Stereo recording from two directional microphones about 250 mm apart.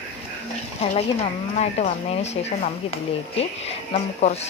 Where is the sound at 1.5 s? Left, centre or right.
Left.